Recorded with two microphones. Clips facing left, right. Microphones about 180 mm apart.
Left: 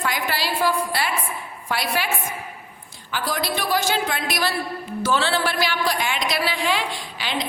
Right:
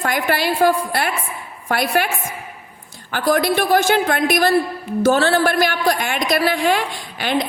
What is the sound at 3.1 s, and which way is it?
A woman's voice, 55° right (ahead or behind).